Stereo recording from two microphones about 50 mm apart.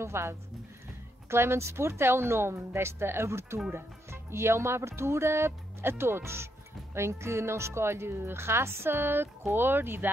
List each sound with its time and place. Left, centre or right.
0.0 s speech: right